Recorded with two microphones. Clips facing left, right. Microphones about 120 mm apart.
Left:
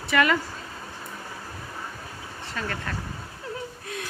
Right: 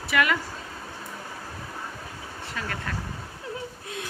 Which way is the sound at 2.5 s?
5° right (ahead or behind).